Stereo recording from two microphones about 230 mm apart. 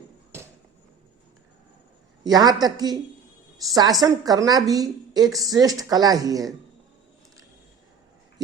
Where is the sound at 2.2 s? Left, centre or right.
Centre.